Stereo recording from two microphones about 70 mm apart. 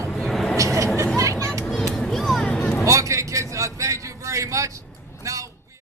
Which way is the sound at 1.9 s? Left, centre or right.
Centre.